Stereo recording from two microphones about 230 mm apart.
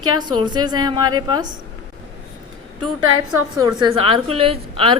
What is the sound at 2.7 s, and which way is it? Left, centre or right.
Speech, centre.